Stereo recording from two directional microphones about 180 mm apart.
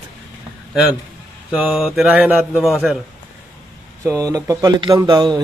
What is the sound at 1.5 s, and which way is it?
Speech, 5° right (ahead or behind).